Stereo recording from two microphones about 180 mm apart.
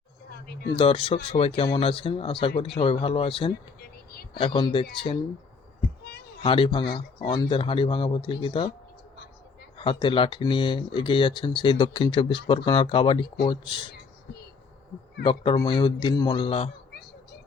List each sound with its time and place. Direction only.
0.7 s speech: 30° left (ahead or behind)
3.5 s a sound: 60° left (ahead or behind)
4.4 s speech: 30° left (ahead or behind)
6.4 s speech: 30° left (ahead or behind)
9.7 s speech: 30° left (ahead or behind)
15.2 s speech: 30° left (ahead or behind)